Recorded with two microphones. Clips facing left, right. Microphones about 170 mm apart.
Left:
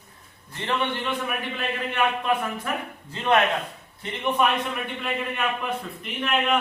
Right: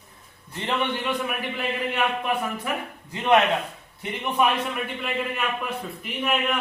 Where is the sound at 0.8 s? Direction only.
10° right (ahead or behind).